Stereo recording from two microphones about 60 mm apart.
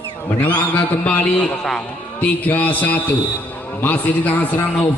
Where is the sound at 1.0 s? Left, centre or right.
Left.